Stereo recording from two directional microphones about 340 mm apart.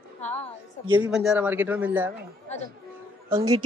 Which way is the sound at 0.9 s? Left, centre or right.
Centre.